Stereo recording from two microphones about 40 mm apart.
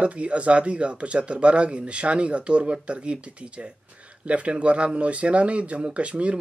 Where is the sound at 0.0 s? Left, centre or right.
Right.